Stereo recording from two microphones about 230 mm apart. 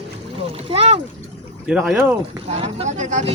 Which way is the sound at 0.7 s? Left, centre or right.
Right.